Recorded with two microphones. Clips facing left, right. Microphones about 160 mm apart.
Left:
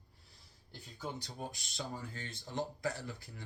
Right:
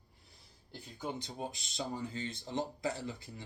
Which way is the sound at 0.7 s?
20° right (ahead or behind).